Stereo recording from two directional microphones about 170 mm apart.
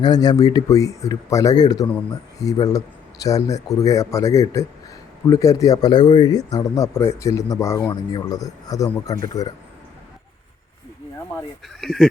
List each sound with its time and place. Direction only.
0.0 s speech: 25° left (ahead or behind)
11.8 s speech: centre (ahead or behind)